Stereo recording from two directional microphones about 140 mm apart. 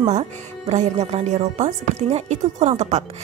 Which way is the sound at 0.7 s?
50° right (ahead or behind).